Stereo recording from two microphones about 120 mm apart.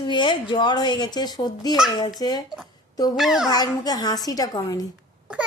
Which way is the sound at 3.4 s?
30° left (ahead or behind).